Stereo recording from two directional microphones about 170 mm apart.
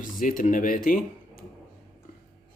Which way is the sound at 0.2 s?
50° left (ahead or behind).